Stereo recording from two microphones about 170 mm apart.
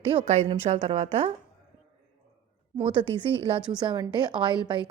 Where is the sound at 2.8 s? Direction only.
30° right (ahead or behind).